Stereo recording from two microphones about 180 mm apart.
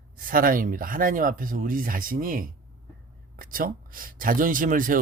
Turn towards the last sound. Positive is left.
turn(degrees=-50)  # may be behind; listen again after turning